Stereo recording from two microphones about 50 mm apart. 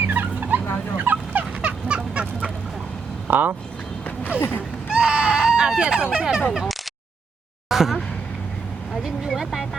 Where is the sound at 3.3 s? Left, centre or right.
Right.